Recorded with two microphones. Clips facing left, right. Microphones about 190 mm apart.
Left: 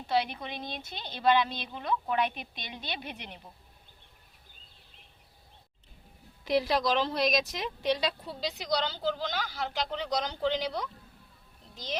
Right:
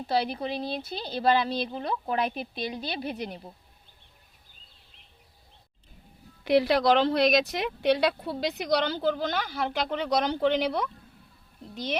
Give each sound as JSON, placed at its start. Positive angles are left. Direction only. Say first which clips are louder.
{"t": 0.1, "sound": "a woman's voice", "louder": "right 2 dB", "side_deg": -35}
{"t": 6.4, "sound": "a child's voice", "louder": "right 5 dB", "side_deg": -65}